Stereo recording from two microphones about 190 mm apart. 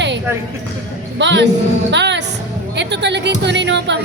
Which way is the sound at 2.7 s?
65° right (ahead or behind).